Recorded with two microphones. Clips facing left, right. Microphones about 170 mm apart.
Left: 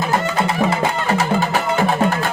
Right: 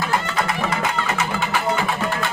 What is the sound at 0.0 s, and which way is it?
Music, 25° left (ahead or behind).